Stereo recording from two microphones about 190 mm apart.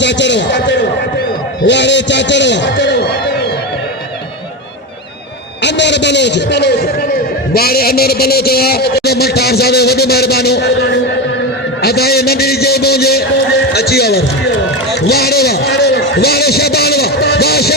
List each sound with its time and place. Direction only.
0.0 s a man's voice: 65° left (ahead or behind)
5.6 s a man's voice: 65° left (ahead or behind)
15.0 s a sound: 55° left (ahead or behind)